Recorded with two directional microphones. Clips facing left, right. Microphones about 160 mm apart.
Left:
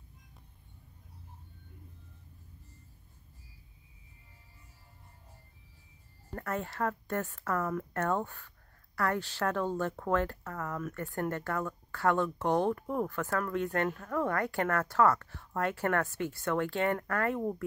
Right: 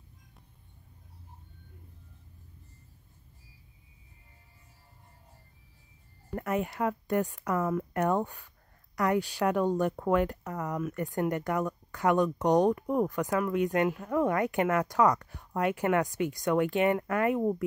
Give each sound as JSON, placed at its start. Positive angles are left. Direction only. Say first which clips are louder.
{"t": 6.3, "sound": "speech", "louder": "right 5 dB", "side_deg": -15}